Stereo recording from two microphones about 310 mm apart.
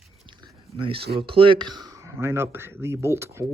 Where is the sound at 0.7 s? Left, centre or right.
Centre.